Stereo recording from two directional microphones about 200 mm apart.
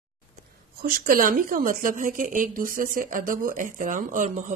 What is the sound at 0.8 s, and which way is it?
Speech, 45° right (ahead or behind).